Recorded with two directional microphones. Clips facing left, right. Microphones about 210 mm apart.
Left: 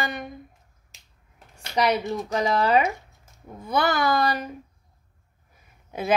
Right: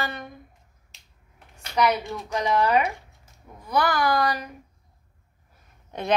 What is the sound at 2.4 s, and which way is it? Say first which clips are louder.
Speech: even; 30° left (ahead or behind).